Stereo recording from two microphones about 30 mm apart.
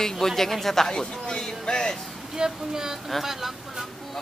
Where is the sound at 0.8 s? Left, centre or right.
Left.